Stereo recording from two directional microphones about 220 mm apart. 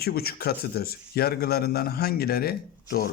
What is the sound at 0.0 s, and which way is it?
Speech, 45° left (ahead or behind).